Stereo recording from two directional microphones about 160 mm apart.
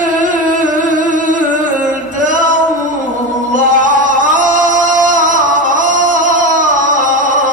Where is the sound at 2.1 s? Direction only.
55° right (ahead or behind).